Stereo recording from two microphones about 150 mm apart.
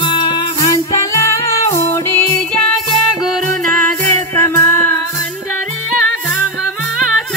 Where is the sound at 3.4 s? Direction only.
60° right (ahead or behind).